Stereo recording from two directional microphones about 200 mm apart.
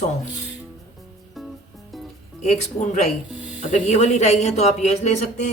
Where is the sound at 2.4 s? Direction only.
35° left (ahead or behind).